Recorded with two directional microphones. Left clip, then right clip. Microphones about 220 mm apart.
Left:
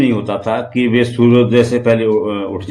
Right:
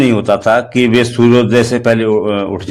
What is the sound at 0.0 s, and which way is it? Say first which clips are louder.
A man's voice: right 5 dB; 45° right (ahead or behind).